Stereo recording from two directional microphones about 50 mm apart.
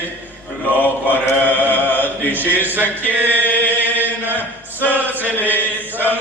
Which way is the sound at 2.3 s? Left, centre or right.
Right.